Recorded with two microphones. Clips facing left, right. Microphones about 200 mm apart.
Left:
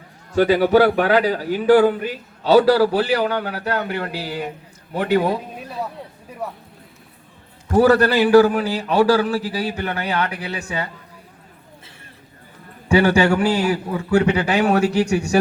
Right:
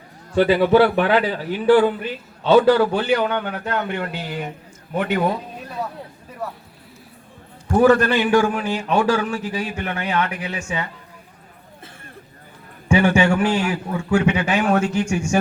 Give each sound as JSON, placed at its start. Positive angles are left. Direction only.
{"t": 0.3, "sound": "a man's voice", "side_deg": 40}
{"t": 7.7, "sound": "a man's voice", "side_deg": 35}
{"t": 12.9, "sound": "a man's voice", "side_deg": 35}